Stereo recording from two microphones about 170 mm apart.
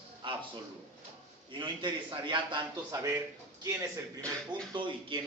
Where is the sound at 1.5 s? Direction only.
30° right (ahead or behind).